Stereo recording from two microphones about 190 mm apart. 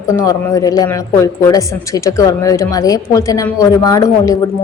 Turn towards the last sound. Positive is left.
turn(degrees=15)  # may be behind; listen again after turning